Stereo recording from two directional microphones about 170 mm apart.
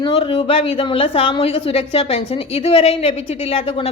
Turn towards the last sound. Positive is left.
turn(degrees=35)  # may be behind; listen again after turning